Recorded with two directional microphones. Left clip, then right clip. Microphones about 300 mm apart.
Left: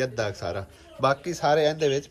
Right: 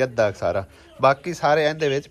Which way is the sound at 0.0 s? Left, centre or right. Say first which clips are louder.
Right 8 dB; centre.